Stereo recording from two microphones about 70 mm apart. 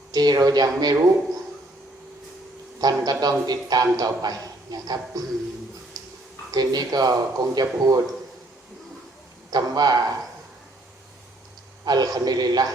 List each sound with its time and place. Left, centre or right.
0.1 s speech: right
2.8 s speech: right
6.0 s a sound: right
6.5 s speech: right
9.5 s speech: right
11.9 s speech: right